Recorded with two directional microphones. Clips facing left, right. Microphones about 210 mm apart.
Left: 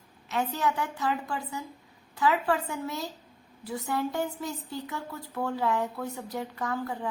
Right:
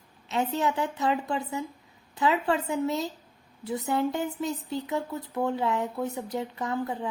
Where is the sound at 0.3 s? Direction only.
25° right (ahead or behind).